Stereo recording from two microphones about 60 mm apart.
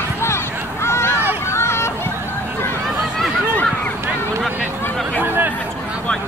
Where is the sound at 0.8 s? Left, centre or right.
Left.